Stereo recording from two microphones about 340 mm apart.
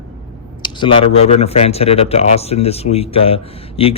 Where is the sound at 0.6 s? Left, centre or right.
Centre.